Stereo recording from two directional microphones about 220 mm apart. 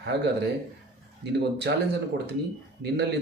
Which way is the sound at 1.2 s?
50° right (ahead or behind).